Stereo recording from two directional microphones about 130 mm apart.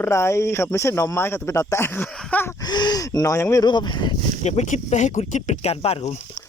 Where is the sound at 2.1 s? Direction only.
15° left (ahead or behind).